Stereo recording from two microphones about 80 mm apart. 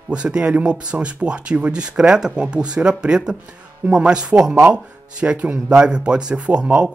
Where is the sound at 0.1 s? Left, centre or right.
Centre.